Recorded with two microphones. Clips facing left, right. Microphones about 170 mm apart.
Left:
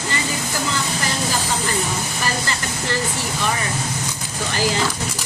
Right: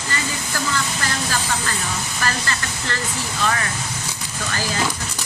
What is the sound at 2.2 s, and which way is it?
Speech, 15° left (ahead or behind).